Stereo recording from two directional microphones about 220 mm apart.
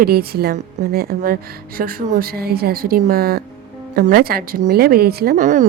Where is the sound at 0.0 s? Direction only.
45° right (ahead or behind).